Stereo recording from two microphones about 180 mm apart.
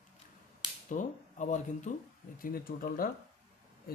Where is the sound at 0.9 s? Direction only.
45° left (ahead or behind).